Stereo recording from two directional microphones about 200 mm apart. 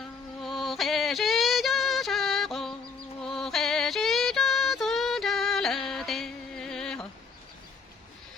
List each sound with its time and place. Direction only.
0.4 s music: centre (ahead or behind)